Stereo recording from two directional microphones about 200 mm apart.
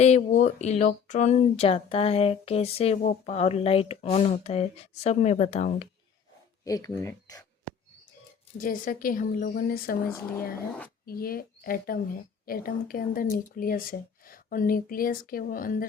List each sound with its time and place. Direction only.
0.0 s speech: 35° left (ahead or behind)
6.7 s speech: 15° left (ahead or behind)
8.5 s a woman's voice: 45° left (ahead or behind)